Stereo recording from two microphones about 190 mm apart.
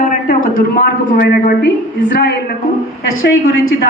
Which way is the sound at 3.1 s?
90° left.